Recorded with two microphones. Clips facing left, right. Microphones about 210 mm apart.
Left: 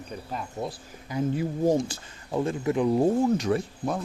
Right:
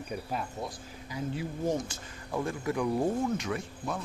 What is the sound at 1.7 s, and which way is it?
Speech, 30° left (ahead or behind).